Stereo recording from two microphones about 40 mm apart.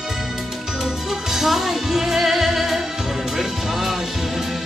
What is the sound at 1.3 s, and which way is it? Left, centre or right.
Music, centre.